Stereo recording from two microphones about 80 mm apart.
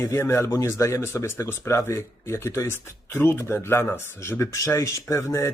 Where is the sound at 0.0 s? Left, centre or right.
Left.